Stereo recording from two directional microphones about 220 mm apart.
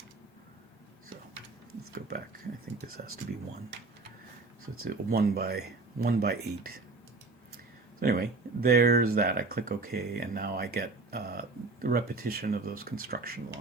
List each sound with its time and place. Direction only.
4.8 s speech: 40° right (ahead or behind)
7.9 s speech: 45° right (ahead or behind)